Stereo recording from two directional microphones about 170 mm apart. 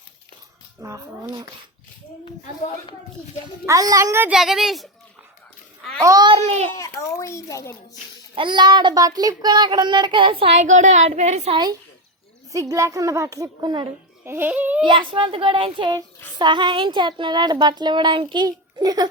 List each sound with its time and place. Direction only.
0.8 s speech: 20° right (ahead or behind)
3.7 s child singing: 20° right (ahead or behind)
4.4 s speech: centre (ahead or behind)
6.0 s child singing: 20° right (ahead or behind)
6.4 s a child's voice: 40° right (ahead or behind)
7.0 s a child's voice: 15° left (ahead or behind)
8.4 s child singing: 25° right (ahead or behind)
11.5 s child singing: 25° right (ahead or behind)
14.3 s speech: 10° right (ahead or behind)
14.8 s child singing: 30° right (ahead or behind)